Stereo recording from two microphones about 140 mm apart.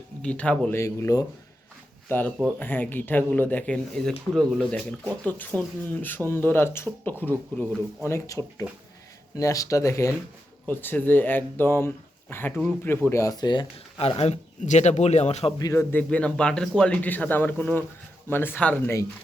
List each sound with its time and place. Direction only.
0.2 s speech: 10° left (ahead or behind)
0.8 s speech: 20° left (ahead or behind)
14.0 s a man's voice: 45° left (ahead or behind)
15.5 s speech: 25° left (ahead or behind)